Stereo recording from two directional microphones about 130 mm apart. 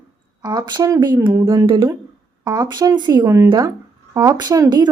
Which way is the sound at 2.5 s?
30° right (ahead or behind).